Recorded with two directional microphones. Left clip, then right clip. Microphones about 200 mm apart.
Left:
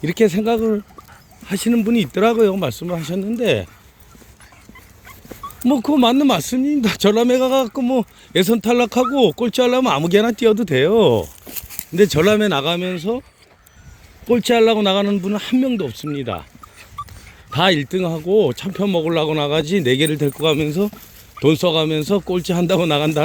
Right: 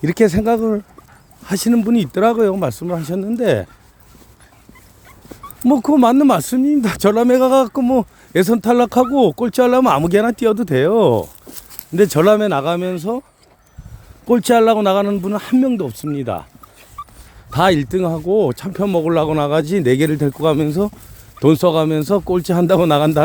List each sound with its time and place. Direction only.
0.2 s a man's voice: 20° right (ahead or behind)
5.6 s speech: 20° right (ahead or behind)
7.4 s a man's voice: 30° right (ahead or behind)
14.3 s speech: 25° right (ahead or behind)
17.5 s a man's voice: 15° right (ahead or behind)